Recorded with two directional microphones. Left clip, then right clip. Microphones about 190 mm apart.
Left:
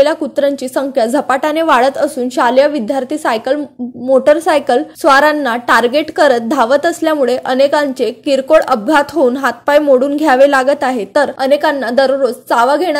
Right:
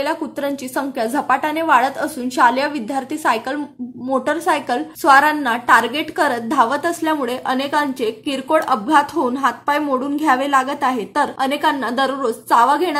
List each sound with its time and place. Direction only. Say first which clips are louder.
0.0 s a woman's voice: left 10 dB; 30° left (ahead or behind)